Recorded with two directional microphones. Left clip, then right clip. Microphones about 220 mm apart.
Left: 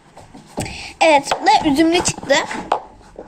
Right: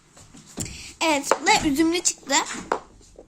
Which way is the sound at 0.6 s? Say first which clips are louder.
Left 10 dB; 40° right (ahead or behind).